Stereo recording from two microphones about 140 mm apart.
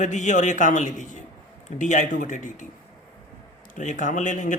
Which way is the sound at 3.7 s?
65° left (ahead or behind).